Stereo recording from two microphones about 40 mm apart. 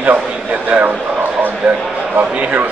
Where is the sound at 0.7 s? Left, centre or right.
Right.